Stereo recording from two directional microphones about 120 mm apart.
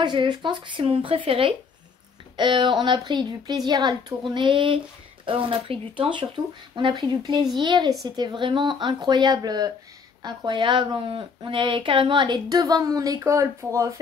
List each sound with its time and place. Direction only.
0.0 s a woman's voice: 40° right (ahead or behind)